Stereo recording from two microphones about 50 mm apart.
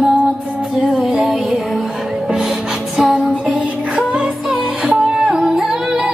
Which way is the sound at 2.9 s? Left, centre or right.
Centre.